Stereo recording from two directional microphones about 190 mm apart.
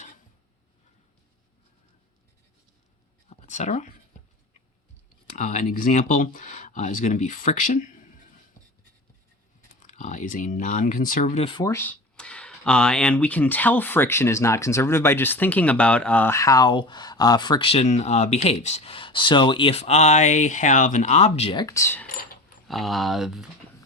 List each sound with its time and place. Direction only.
3.2 s a sound: 35° left (ahead or behind)
5.4 s speech: 40° left (ahead or behind)
9.8 s speech: 40° left (ahead or behind)
11.6 s speech: 15° left (ahead or behind)
22.7 s speech: centre (ahead or behind)